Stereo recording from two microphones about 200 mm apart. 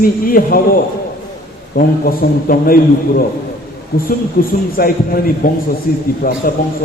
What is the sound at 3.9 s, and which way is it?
Speech, 50° left (ahead or behind).